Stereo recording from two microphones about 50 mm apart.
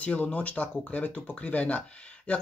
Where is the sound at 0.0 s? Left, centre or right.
Left.